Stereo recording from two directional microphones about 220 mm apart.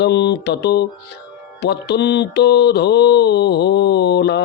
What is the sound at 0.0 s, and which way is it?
Mantra, 50° left (ahead or behind).